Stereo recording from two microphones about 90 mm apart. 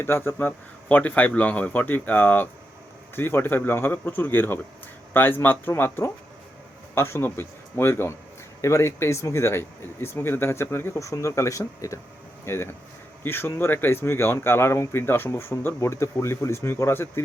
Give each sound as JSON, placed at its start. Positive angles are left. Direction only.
{"t": 0.0, "sound": "speech", "side_deg": 25}